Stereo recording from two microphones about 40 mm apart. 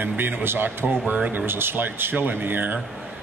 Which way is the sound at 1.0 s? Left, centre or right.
Right.